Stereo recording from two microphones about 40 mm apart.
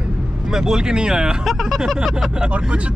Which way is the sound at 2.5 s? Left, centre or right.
Right.